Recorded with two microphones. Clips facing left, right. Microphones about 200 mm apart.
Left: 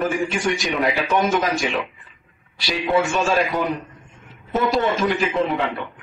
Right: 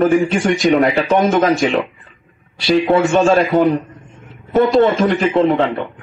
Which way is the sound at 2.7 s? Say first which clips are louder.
Right 8 dB; 55° right (ahead or behind).